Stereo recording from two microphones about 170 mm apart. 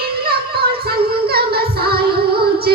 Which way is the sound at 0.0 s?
65° right (ahead or behind).